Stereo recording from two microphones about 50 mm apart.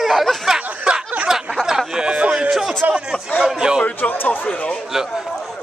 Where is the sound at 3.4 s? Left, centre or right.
Centre.